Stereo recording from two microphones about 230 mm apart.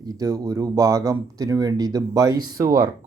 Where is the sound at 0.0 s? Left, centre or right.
Centre.